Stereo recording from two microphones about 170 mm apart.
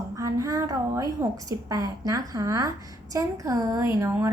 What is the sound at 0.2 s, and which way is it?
A woman's voice, 20° right (ahead or behind).